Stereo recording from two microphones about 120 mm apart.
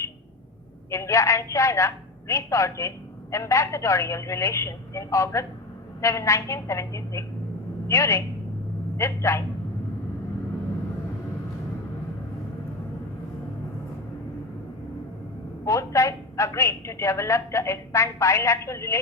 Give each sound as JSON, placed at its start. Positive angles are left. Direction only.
{"t": 0.9, "sound": "a man's voice", "side_deg": 25}
{"t": 15.6, "sound": "a woman's voice", "side_deg": 25}